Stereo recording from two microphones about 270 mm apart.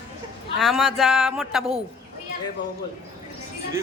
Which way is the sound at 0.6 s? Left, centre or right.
Centre.